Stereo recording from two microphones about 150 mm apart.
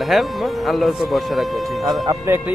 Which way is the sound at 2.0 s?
20° right (ahead or behind).